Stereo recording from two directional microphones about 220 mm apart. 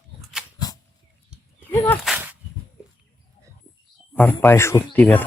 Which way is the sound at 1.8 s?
Centre (ahead or behind).